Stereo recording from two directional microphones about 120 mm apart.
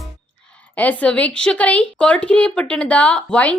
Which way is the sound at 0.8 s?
10° left (ahead or behind).